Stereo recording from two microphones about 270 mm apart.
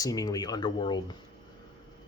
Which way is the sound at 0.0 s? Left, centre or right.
Centre.